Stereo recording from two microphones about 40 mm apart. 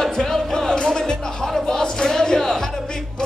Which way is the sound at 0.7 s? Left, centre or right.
Centre.